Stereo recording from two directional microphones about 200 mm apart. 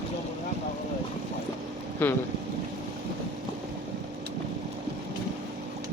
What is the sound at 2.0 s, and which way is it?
Speech, 10° left (ahead or behind).